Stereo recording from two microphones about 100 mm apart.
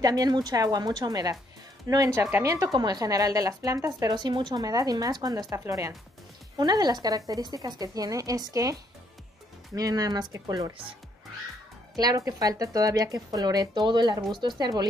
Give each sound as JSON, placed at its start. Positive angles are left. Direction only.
{"t": 0.0, "sound": "speech", "side_deg": -40}
{"t": 4.1, "sound": "speech", "side_deg": -50}
{"t": 9.8, "sound": "speech", "side_deg": -40}
{"t": 12.0, "sound": "speech", "side_deg": -40}